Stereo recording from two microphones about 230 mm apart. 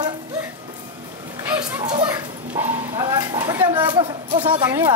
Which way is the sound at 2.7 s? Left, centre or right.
Centre.